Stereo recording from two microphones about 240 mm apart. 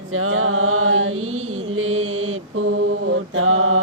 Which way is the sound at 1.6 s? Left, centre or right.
Right.